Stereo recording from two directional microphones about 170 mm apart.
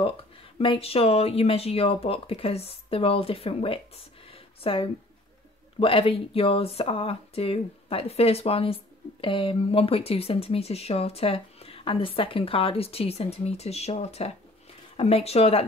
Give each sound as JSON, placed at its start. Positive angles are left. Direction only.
{"t": 0.0, "sound": "speech", "side_deg": 30}